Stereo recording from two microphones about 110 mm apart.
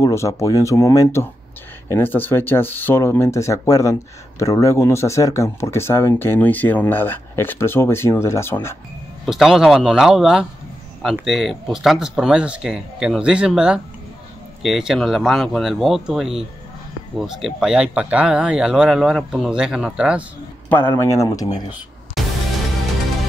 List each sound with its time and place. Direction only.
0.0 s speech: 30° left (ahead or behind)
9.2 s speech: centre (ahead or behind)
20.6 s a man's voice: 15° left (ahead or behind); by 21.7 s 40° left (ahead or behind)
22.2 s music: centre (ahead or behind)